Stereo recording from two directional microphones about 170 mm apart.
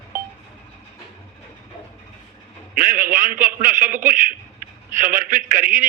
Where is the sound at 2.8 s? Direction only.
55° right (ahead or behind).